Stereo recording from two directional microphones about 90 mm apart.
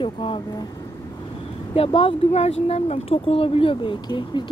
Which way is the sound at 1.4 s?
90° left.